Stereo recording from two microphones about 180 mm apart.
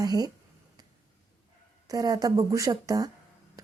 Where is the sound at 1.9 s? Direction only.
20° right (ahead or behind).